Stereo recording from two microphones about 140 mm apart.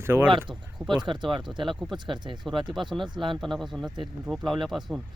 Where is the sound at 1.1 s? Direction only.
35° right (ahead or behind).